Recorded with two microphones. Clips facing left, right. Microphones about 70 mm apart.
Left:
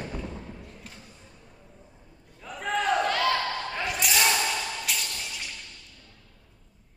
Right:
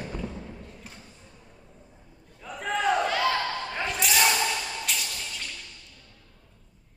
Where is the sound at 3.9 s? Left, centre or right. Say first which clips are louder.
Right 1 dB; centre.